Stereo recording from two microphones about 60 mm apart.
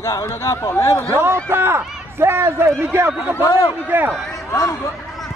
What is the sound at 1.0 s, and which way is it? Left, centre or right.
A man's voice, right.